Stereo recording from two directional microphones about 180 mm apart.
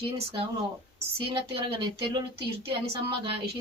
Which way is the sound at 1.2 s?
30° right (ahead or behind).